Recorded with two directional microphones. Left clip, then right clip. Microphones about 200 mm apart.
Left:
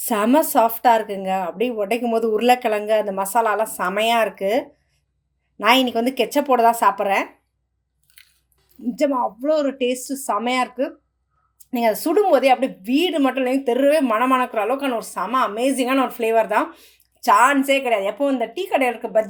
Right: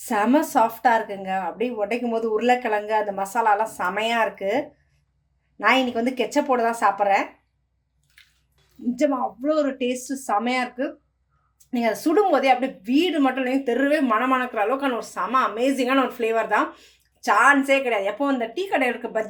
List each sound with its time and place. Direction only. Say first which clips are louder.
0.0 s a woman's voice: left 3 dB; 40° left (ahead or behind)
5.8 s speech: left 4 dB; 40° left (ahead or behind)
8.2 s drip: left 2 dB; 45° left (ahead or behind)
9.0 s a woman's voice: left 3 dB; 30° left (ahead or behind)